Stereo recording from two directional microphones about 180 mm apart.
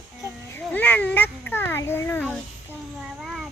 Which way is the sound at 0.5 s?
10° left (ahead or behind).